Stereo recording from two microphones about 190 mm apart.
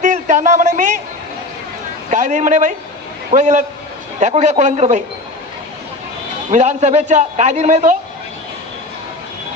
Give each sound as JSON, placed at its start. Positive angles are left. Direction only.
{"t": 0.0, "sound": "a sound", "side_deg": -40}
{"t": 2.0, "sound": "a man's voice", "side_deg": -40}
{"t": 6.5, "sound": "a man's voice", "side_deg": -35}